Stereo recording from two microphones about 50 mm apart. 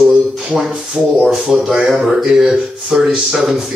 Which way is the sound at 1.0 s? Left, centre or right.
Right.